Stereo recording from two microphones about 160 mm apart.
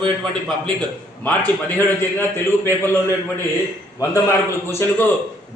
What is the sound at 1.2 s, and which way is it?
A man's voice, 10° left (ahead or behind).